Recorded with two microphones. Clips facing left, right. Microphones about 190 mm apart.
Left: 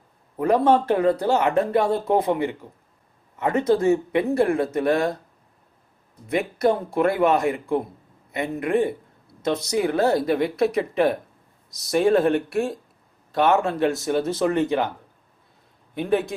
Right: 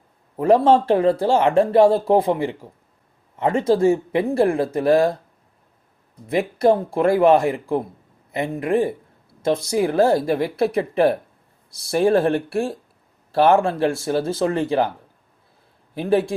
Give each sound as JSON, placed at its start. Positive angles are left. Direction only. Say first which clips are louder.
{"t": 0.3, "sound": "speech", "louder": "right 3 dB", "side_deg": -25}
{"t": 6.3, "sound": "speech", "louder": "right 4 dB", "side_deg": -25}
{"t": 16.0, "sound": "speech", "louder": "right 3 dB", "side_deg": -30}